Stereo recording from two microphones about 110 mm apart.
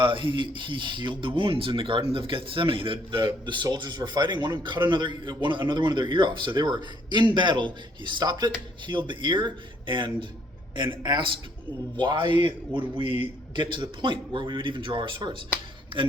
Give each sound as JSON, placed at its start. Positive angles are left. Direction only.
{"t": 0.0, "sound": "speech", "side_deg": -50}